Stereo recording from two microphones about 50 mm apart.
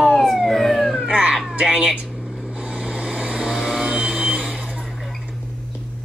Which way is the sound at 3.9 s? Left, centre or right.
Centre.